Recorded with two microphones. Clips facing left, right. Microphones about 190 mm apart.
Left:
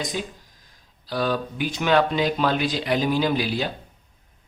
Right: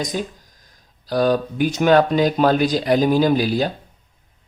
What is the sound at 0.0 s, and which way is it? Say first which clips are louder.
Speech: right 4 dB; 40° right (ahead or behind).